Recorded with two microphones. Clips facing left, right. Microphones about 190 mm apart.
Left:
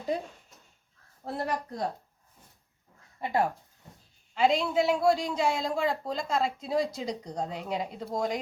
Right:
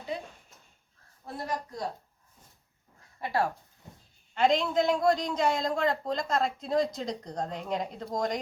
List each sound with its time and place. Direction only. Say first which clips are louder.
1.2 s a woman's voice: left 3 dB; 65° left (ahead or behind)
3.2 s speech: left 1 dB; 20° left (ahead or behind)
4.4 s a man's voice: even; 5° left (ahead or behind)